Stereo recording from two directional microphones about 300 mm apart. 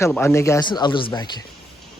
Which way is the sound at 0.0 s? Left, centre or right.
Centre.